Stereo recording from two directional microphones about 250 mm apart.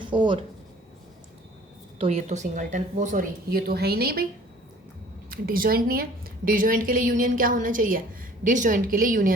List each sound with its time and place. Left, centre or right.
0.0 s speech: centre
2.0 s a woman's voice: right
5.3 s a woman's voice: right